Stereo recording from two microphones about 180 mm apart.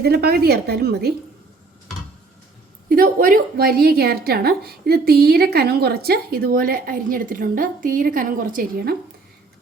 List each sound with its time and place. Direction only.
0.0 s a woman's voice: 60° right (ahead or behind)
2.9 s a woman's voice: 50° right (ahead or behind)